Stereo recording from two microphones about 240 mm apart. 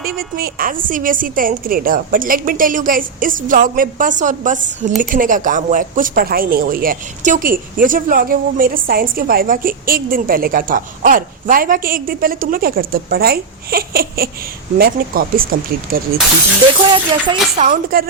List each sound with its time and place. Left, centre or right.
0.2 s a woman's voice: right
16.9 s speech: right
17.9 s a woman's voice: right